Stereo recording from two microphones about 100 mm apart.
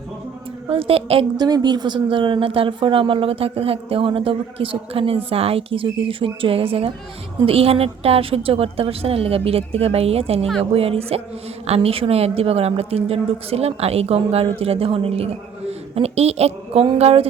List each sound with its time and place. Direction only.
0.7 s a woman's voice: 65° right (ahead or behind)
1.4 s a woman's voice: 45° right (ahead or behind); by 10.4 s 90° right
10.6 s a woman's voice: 75° right (ahead or behind)